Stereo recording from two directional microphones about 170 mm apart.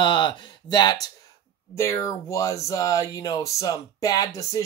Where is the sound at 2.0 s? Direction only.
20° left (ahead or behind).